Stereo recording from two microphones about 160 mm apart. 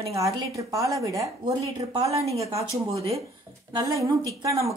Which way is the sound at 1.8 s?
40° right (ahead or behind).